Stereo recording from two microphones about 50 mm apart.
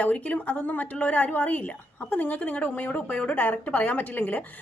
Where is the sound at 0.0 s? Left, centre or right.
Left.